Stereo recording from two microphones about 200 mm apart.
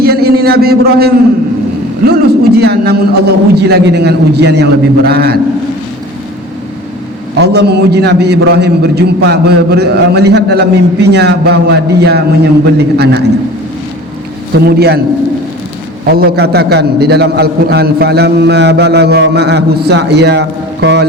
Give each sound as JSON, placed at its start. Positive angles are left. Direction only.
{"t": 0.0, "sound": "a sound", "side_deg": -50}
{"t": 2.0, "sound": "a man's voice", "side_deg": -55}
{"t": 7.3, "sound": "a man's voice", "side_deg": -55}
{"t": 14.6, "sound": "a man's voice", "side_deg": -55}
{"t": 16.0, "sound": "a man's voice", "side_deg": -50}